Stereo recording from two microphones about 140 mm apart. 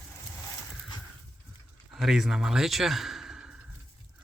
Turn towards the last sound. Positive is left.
turn(degrees=-5)  # may be behind; listen again after turning